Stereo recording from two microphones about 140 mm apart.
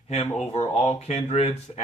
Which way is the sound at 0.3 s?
50° left (ahead or behind).